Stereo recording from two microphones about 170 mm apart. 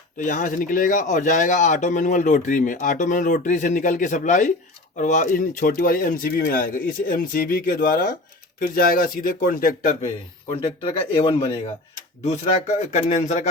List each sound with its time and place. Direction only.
0.2 s speech: 50° left (ahead or behind)
10.5 s speech: 30° left (ahead or behind)